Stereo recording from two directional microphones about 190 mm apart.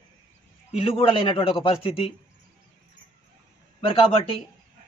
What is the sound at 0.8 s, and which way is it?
A man's voice, 30° left (ahead or behind).